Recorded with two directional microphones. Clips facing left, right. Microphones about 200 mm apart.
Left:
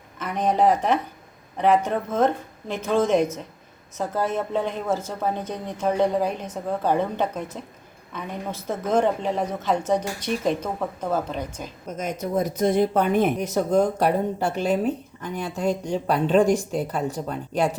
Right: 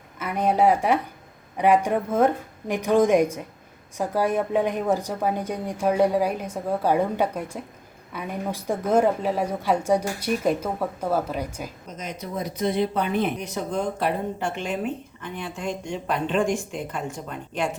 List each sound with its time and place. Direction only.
0.2 s a woman's voice: 10° right (ahead or behind)
11.9 s speech: 50° left (ahead or behind)